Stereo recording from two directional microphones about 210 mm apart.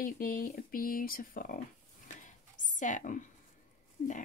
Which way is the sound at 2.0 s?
35° left (ahead or behind).